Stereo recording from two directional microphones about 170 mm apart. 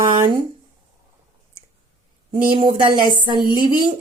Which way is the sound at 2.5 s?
30° right (ahead or behind).